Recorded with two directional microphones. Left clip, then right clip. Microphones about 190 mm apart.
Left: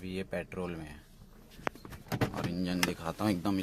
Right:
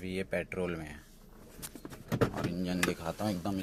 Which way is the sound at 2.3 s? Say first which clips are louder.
Even; 15° left (ahead or behind).